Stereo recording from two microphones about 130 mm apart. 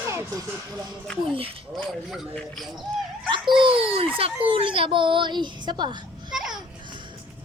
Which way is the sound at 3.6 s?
45° right (ahead or behind).